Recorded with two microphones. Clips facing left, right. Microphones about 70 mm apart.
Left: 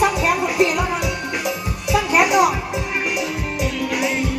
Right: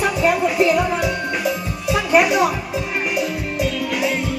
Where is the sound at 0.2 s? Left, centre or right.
Centre.